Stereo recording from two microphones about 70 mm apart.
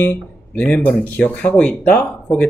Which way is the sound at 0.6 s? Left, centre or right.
Centre.